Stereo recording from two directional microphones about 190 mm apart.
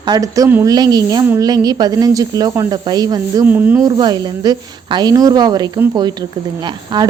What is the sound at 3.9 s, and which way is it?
A woman's voice, 20° right (ahead or behind).